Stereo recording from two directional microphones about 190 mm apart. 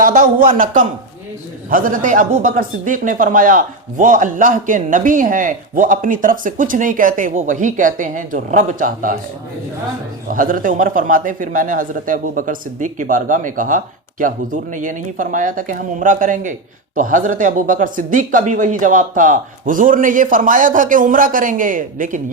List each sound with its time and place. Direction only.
0.0 s a man's voice: 45° right (ahead or behind)
10.2 s a man's voice: 45° right (ahead or behind)